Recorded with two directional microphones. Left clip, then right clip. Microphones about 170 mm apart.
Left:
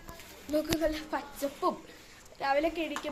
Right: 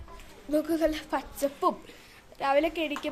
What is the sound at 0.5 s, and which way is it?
A woman's voice, 45° right (ahead or behind).